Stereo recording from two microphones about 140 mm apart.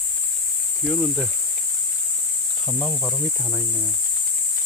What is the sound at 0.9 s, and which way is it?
Speech, centre (ahead or behind).